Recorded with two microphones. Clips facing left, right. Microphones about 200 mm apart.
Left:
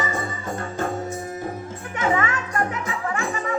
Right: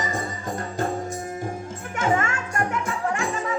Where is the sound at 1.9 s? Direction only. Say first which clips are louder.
Even; 50° right (ahead or behind).